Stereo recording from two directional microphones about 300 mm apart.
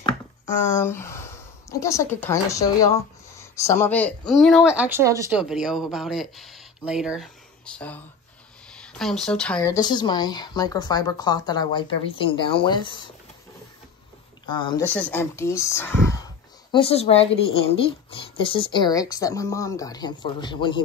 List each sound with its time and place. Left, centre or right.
0.7 s speech: centre
14.5 s speech: centre